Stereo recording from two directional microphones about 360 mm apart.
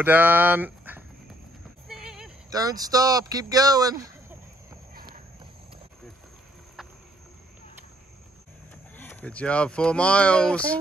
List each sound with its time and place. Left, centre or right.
0.0 s speech: centre
4.9 s walk: right
8.9 s speech: centre